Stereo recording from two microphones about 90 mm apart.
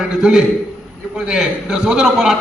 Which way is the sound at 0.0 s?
10° right (ahead or behind).